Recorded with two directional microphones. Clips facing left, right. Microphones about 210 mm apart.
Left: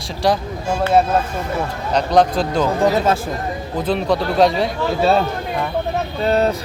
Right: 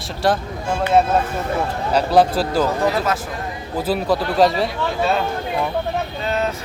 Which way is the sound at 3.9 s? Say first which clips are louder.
Left 1 dB; 5° right (ahead or behind).